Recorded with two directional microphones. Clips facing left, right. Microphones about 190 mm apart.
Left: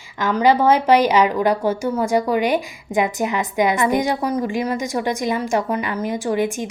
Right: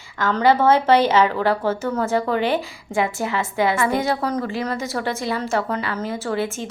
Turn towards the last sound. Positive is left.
turn(degrees=15)  # may be behind; listen again after turning